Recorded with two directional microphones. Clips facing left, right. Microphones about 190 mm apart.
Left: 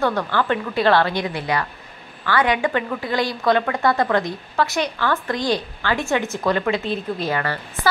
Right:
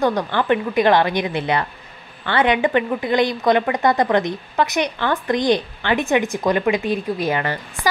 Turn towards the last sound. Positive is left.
turn(degrees=-20)  # may be behind; listen again after turning